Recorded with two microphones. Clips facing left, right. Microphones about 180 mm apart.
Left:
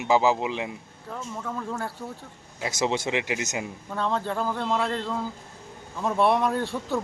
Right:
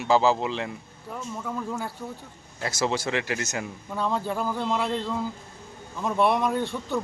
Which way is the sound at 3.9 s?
10° right (ahead or behind).